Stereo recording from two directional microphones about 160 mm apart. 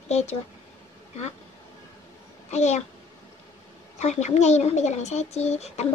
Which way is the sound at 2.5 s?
45° left (ahead or behind).